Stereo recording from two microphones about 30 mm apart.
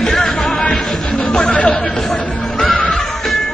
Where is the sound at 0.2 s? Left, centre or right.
Left.